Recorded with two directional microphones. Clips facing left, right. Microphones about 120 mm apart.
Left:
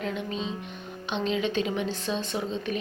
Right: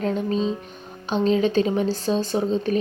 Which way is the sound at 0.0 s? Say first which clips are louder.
Right 8 dB; 40° right (ahead or behind).